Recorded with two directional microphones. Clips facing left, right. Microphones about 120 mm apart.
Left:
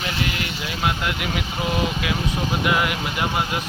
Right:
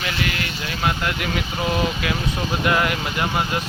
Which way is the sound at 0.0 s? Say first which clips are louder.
Even; 20° left (ahead or behind).